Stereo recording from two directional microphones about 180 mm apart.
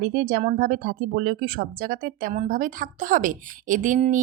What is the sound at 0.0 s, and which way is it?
Speech, 55° right (ahead or behind).